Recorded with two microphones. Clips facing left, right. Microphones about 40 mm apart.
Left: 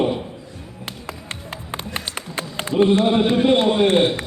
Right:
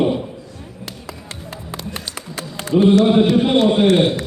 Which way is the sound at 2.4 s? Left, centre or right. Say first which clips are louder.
Right 2 dB; left.